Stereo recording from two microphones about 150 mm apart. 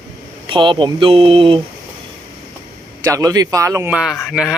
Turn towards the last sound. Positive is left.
turn(degrees=0)  # may be behind; listen again after turning